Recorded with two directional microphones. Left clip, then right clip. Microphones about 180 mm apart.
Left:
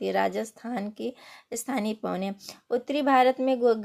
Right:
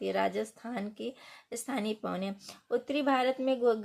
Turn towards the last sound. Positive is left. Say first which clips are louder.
# left 5 dB
turn(degrees=30)  # may be behind; listen again after turning